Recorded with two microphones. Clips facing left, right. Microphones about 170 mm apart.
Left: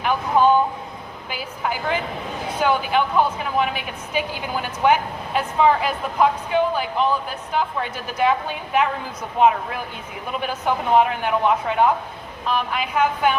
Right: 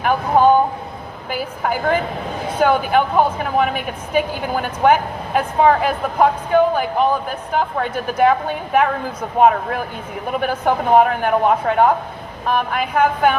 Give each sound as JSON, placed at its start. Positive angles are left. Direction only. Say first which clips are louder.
{"t": 0.0, "sound": "speech", "louder": "right 4 dB", "side_deg": -50}